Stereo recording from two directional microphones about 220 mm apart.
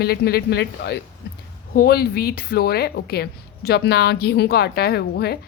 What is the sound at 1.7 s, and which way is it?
Speech, 40° left (ahead or behind).